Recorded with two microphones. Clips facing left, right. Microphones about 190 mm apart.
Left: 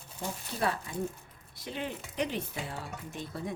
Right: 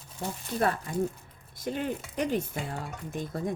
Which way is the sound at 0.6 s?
50° right (ahead or behind).